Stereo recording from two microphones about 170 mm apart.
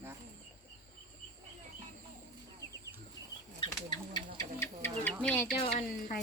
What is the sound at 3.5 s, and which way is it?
Bird, 25° left (ahead or behind).